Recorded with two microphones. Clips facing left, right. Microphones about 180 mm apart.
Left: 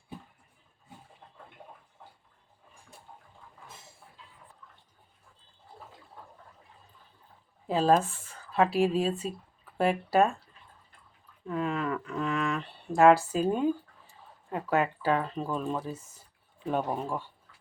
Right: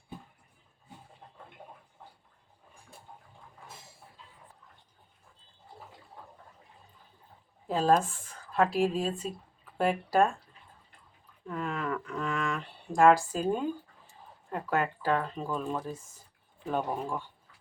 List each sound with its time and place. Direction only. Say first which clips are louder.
7.7 s speech: left 1 dB; centre (ahead or behind)
11.4 s speech: left 3 dB; 5° left (ahead or behind)